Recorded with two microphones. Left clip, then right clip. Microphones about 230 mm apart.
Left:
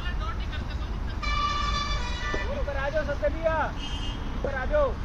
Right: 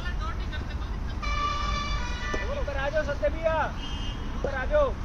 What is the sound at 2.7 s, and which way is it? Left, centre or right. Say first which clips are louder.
Vehicle: right 1 dB; right.